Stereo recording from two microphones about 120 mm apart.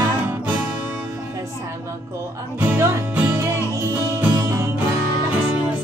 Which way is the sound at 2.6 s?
10° right (ahead or behind).